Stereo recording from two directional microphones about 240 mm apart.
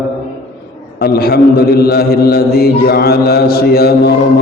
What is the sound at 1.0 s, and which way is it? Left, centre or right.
Speech, left.